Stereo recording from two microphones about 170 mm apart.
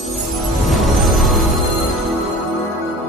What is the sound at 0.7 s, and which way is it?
Music, centre (ahead or behind).